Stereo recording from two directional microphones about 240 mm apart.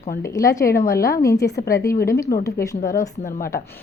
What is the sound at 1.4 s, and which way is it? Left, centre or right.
A woman's voice, left.